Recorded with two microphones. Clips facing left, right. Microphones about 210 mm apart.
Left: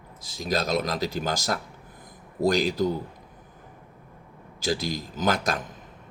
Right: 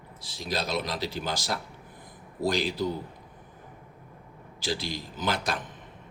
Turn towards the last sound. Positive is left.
turn(degrees=45)  # may be behind; listen again after turning